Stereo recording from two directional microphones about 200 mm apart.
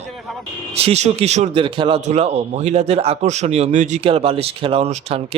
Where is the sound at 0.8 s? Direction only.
30° right (ahead or behind).